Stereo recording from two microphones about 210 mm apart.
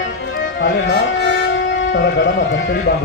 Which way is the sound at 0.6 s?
60° left (ahead or behind).